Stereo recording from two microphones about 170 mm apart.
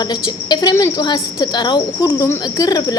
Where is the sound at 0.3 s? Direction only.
25° left (ahead or behind).